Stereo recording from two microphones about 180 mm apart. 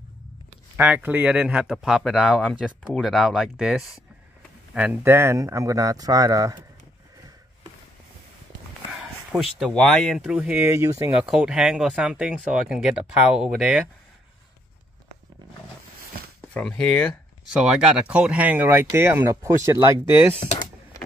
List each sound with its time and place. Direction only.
0.7 s speech: 10° right (ahead or behind)
9.3 s speech: centre (ahead or behind)
11.2 s speech: 5° right (ahead or behind)
16.5 s speech: 5° left (ahead or behind)
17.5 s speech: 5° right (ahead or behind)